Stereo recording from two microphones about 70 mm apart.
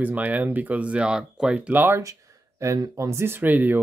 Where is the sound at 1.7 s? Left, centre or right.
Right.